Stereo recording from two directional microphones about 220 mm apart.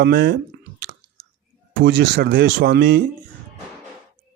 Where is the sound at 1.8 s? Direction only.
45° right (ahead or behind).